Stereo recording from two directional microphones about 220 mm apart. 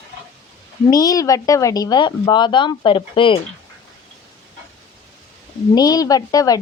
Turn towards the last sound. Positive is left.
turn(degrees=15)  # may be behind; listen again after turning